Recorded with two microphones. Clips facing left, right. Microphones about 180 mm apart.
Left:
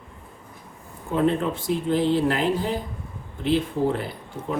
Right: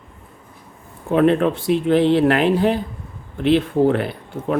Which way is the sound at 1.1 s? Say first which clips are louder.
Right 7 dB; 70° right (ahead or behind).